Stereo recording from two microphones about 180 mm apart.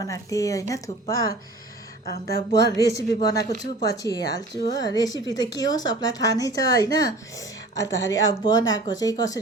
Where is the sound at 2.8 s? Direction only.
20° left (ahead or behind).